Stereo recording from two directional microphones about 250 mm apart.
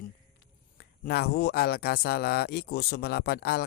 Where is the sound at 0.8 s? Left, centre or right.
Left.